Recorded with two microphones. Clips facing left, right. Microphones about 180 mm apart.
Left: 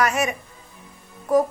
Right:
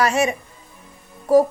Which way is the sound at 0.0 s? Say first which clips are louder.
Right 3 dB; 30° right (ahead or behind).